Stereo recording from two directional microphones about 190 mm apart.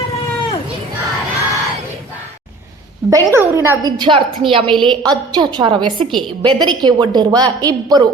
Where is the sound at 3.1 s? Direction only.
15° right (ahead or behind).